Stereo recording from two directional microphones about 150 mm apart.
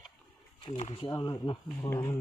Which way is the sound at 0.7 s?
45° left (ahead or behind).